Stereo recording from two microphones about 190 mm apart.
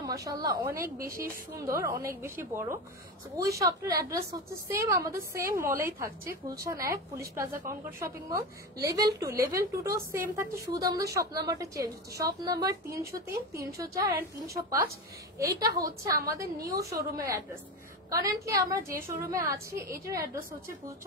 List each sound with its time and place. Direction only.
0.0 s a woman's voice: 20° right (ahead or behind)
15.3 s a woman's voice: 15° right (ahead or behind)